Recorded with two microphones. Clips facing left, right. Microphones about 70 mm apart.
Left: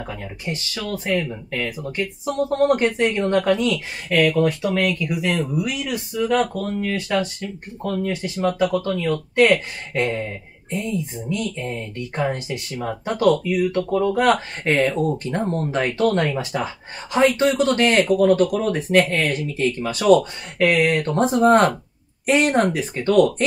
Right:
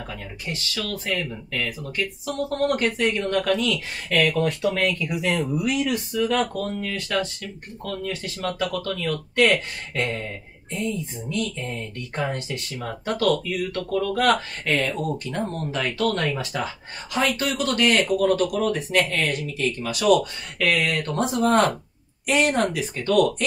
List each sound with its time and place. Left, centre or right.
0.8 s a woman's voice: left
4.1 s speech: centre
6.6 s a woman's voice: centre
11.2 s a woman's voice: centre; by 23.3 s left